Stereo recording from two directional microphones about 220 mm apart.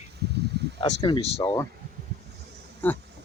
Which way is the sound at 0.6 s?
50° right (ahead or behind).